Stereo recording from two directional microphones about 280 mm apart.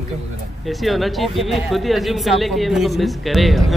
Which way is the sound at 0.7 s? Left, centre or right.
Centre.